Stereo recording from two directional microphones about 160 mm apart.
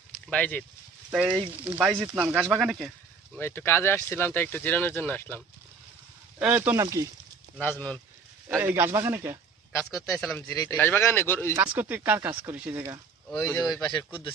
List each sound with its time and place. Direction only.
0.3 s speech: 10° left (ahead or behind)
1.1 s speech: 5° right (ahead or behind)
3.3 s speech: 15° left (ahead or behind)
6.4 s speech: 10° right (ahead or behind)
7.6 s speech: 10° left (ahead or behind)
8.4 s speech: 15° right (ahead or behind)
10.2 s speech: 5° left (ahead or behind)
10.5 s speech: 20° left (ahead or behind)
11.5 s speech: 10° right (ahead or behind)
13.3 s speech: 15° left (ahead or behind)
13.8 s speech: 25° left (ahead or behind)